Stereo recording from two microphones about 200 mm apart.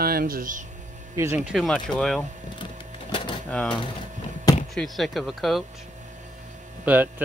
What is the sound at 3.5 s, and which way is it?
Speech, 5° left (ahead or behind).